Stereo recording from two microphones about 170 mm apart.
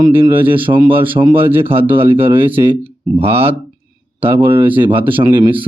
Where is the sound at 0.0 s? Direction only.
30° right (ahead or behind).